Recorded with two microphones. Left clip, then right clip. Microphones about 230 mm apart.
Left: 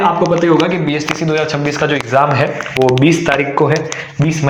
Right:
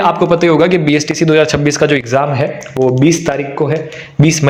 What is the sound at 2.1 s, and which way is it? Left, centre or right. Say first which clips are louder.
A man's voice: left 1 dB; right.